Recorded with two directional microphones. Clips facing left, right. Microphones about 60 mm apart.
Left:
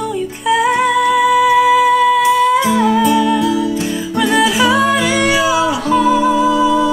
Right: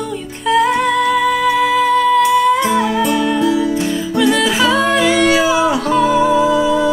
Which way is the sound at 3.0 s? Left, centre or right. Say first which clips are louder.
Left 2 dB; right.